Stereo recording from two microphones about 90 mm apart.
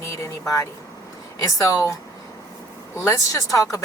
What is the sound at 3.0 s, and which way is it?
Speech, 40° left (ahead or behind).